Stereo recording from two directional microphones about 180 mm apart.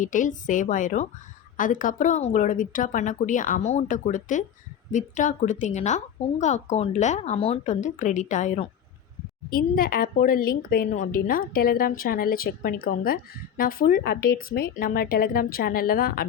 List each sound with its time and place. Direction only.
0.0 s a woman's voice: 45° left (ahead or behind)
9.5 s a woman's voice: 55° left (ahead or behind)